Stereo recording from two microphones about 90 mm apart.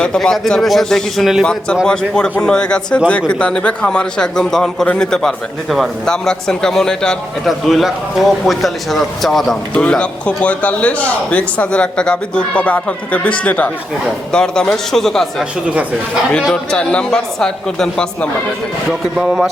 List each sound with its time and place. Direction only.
0.0 s a man's voice: 5° left (ahead or behind)
9.7 s a man's voice: 10° left (ahead or behind)
15.6 s speech: 15° right (ahead or behind)
16.7 s speech: 10° left (ahead or behind)
18.9 s a man's voice: 5° right (ahead or behind)